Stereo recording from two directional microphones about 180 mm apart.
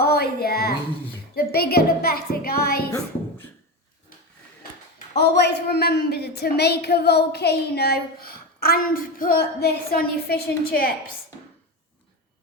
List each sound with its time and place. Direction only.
0.0 s a woman's voice: 60° left (ahead or behind)
2.9 s a sound: 10° left (ahead or behind)
5.1 s a woman's voice: 70° left (ahead or behind)